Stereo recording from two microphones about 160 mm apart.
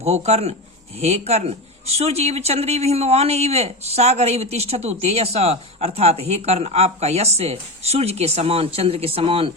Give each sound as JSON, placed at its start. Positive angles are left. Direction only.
{"t": 0.0, "sound": "speech", "side_deg": -40}